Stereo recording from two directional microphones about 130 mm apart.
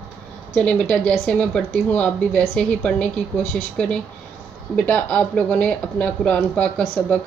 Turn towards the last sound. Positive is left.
turn(degrees=5)  # may be behind; listen again after turning